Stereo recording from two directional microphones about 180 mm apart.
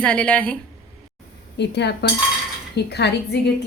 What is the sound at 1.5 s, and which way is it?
Speech, 70° left (ahead or behind).